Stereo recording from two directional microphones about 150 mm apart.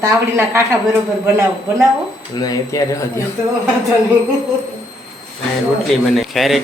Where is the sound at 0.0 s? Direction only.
15° right (ahead or behind).